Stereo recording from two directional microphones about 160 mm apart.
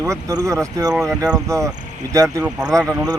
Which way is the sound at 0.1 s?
20° right (ahead or behind).